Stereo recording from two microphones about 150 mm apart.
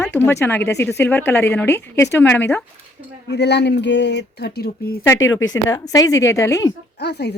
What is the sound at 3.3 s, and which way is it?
Speech, 90° left.